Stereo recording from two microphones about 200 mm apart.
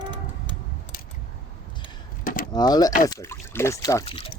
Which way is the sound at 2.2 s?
45° left (ahead or behind).